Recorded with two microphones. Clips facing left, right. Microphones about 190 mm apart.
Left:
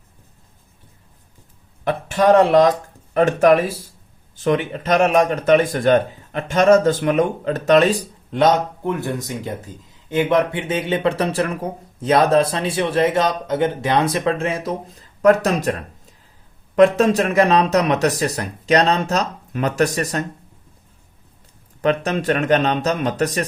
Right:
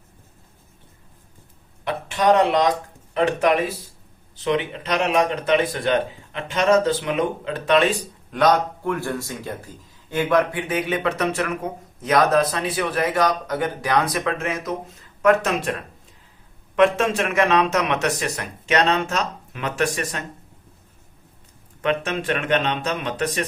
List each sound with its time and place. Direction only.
1.8 s speech: 45° left (ahead or behind)
16.7 s speech: 40° left (ahead or behind)
21.8 s speech: 40° left (ahead or behind)